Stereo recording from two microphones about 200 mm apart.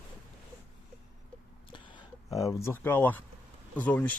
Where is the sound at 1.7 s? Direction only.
20° left (ahead or behind).